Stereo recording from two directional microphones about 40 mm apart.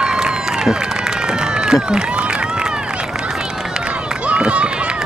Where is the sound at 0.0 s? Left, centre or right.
Centre.